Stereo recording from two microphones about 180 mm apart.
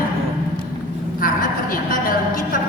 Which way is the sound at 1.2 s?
50° left (ahead or behind).